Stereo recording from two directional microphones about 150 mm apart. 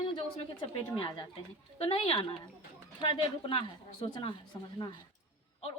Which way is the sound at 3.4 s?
35° left (ahead or behind).